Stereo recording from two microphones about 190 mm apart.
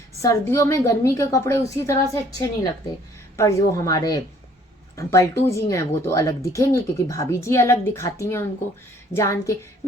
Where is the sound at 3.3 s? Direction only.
15° left (ahead or behind).